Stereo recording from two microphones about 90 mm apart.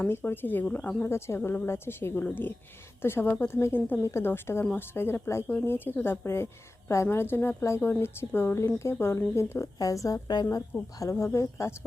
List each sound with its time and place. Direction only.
0.0 s a woman's voice: 25° left (ahead or behind); by 10.2 s 40° left (ahead or behind)
10.7 s speech: 10° left (ahead or behind)
11.1 s a woman's voice: 30° left (ahead or behind)